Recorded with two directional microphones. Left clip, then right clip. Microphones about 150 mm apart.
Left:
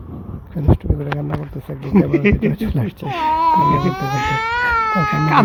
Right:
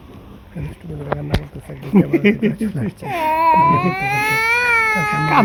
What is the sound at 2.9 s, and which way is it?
Speech, 5° right (ahead or behind).